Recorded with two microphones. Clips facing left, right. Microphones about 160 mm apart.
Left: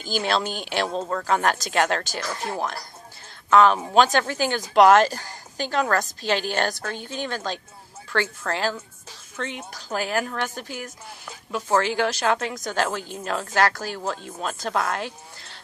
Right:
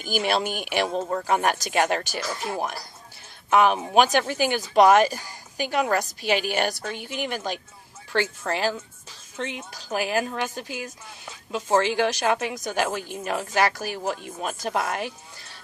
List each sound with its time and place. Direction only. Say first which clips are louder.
0.0 s a woman's voice: even; 15° right (ahead or behind)